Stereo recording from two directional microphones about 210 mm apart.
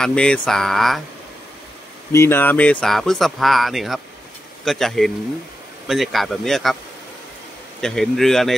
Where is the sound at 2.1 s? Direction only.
10° left (ahead or behind).